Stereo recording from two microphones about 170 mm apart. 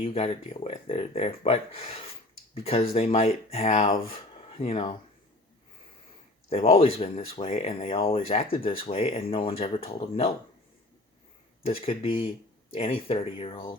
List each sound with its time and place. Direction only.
0.0 s speech: 35° left (ahead or behind)
6.5 s speech: 35° left (ahead or behind)
11.6 s speech: 35° left (ahead or behind)